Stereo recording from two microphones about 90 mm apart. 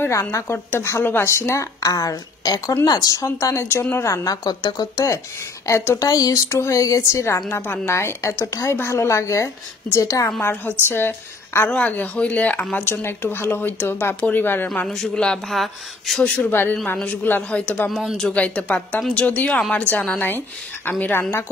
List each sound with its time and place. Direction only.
0.0 s speech: 35° left (ahead or behind)
5.7 s speech: 25° left (ahead or behind)
5.9 s speech: 45° left (ahead or behind)
10.5 s speech: 25° left (ahead or behind)
14.9 s speech: 5° left (ahead or behind)
16.4 s a man's voice: 25° left (ahead or behind); by 18.3 s 5° left (ahead or behind)
18.3 s speech: 15° left (ahead or behind)